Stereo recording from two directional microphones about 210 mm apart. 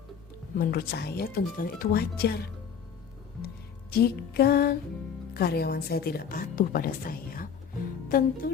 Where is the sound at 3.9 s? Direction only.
45° left (ahead or behind).